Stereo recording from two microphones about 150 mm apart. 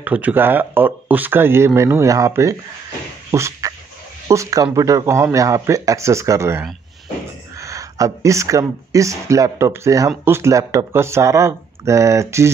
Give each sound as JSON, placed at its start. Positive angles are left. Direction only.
{"t": 0.0, "sound": "speech", "side_deg": -10}
{"t": 3.3, "sound": "a sound", "side_deg": -20}
{"t": 4.3, "sound": "speech", "side_deg": -20}